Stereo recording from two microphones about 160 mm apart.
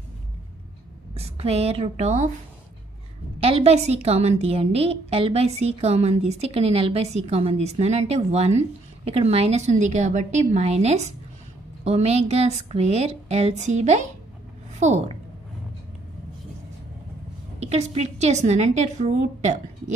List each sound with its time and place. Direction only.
1.1 s a woman's voice: 40° right (ahead or behind)
3.3 s a woman's voice: 35° right (ahead or behind)
17.6 s a woman's voice: 45° right (ahead or behind)